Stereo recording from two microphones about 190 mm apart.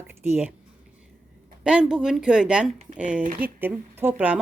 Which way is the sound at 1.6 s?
5° right (ahead or behind).